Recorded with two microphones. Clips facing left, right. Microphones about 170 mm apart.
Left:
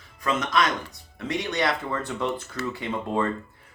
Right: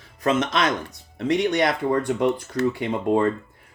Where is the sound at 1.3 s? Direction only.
20° right (ahead or behind).